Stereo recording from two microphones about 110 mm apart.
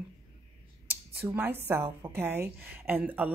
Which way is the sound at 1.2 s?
20° right (ahead or behind).